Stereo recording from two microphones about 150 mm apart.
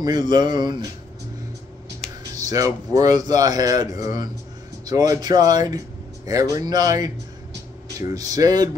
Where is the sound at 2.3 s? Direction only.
25° right (ahead or behind).